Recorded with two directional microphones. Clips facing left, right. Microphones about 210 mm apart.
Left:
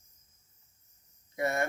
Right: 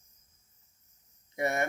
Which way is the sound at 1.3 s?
20° right (ahead or behind).